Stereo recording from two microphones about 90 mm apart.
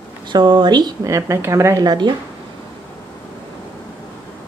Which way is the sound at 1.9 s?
60° right (ahead or behind).